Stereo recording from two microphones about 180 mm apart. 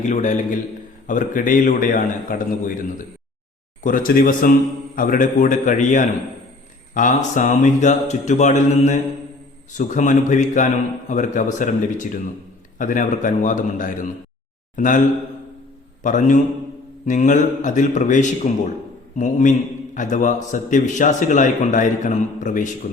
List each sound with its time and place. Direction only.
0.1 s a man's voice: 45° left (ahead or behind)
16.0 s a man's voice: 45° left (ahead or behind)